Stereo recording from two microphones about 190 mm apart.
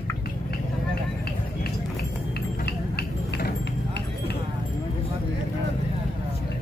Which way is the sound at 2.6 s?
60° left (ahead or behind).